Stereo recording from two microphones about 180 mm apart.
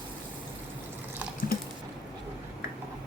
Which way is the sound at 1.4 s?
55° left (ahead or behind).